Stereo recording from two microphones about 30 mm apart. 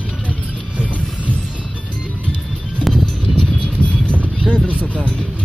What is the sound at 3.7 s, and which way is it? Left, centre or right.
Horse, left.